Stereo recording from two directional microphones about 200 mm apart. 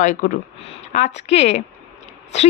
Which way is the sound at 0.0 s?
40° left (ahead or behind).